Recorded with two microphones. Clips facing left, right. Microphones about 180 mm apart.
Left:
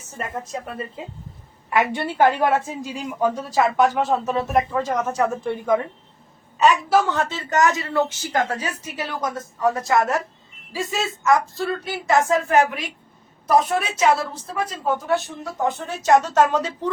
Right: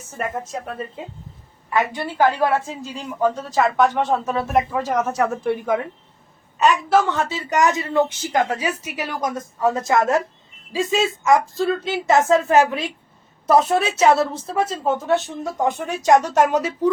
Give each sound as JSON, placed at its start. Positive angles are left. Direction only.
{"t": 0.5, "sound": "speech", "side_deg": 0}
{"t": 2.4, "sound": "speech", "side_deg": 15}
{"t": 6.6, "sound": "speech", "side_deg": 5}
{"t": 7.3, "sound": "a woman's voice", "side_deg": -20}